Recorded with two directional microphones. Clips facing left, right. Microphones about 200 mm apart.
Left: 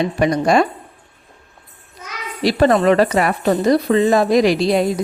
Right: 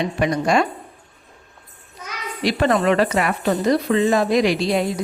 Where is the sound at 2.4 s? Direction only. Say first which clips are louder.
Left 4 dB; 35° left (ahead or behind).